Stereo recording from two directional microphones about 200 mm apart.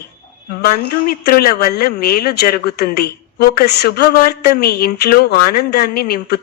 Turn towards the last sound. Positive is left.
turn(degrees=50)  # may be behind; listen again after turning